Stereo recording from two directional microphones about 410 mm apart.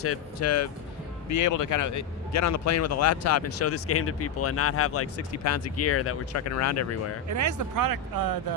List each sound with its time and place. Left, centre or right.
0.0 s a man's voice: left
7.3 s speech: right